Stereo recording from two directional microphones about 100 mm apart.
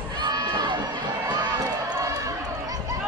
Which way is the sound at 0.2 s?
45° right (ahead or behind).